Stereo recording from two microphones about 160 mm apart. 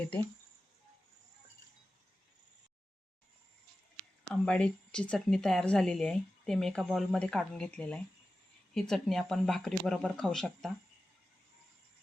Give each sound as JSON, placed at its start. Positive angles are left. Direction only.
{"t": 4.2, "sound": "speech", "side_deg": 5}